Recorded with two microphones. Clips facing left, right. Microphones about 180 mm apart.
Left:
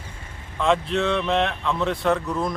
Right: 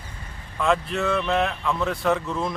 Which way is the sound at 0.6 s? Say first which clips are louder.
Left 2 dB; centre (ahead or behind).